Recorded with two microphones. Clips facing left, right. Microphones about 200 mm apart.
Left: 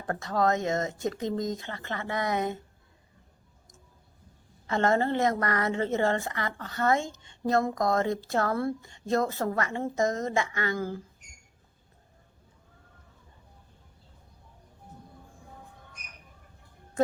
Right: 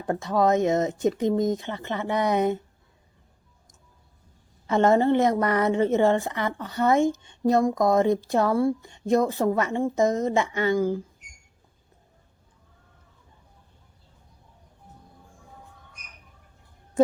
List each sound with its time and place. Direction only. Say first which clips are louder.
0.1 s speech: right 5 dB; 15° right (ahead or behind)
4.6 s speech: right 6 dB; 20° right (ahead or behind)